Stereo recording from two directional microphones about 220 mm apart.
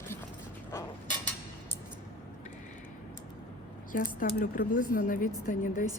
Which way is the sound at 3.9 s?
40° left (ahead or behind).